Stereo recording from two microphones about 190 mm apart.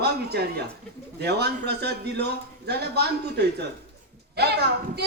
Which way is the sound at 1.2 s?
60° right (ahead or behind).